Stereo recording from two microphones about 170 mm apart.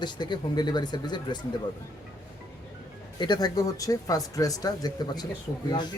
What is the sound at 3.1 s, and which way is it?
Speech, 25° left (ahead or behind).